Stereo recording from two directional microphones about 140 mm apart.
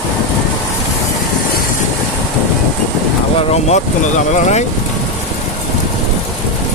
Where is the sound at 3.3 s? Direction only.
50° left (ahead or behind).